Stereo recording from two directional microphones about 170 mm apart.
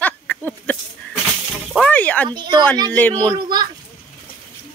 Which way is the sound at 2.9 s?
10° left (ahead or behind).